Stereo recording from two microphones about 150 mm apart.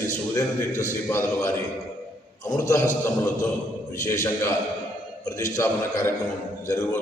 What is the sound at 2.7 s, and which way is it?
A man's voice, 15° left (ahead or behind).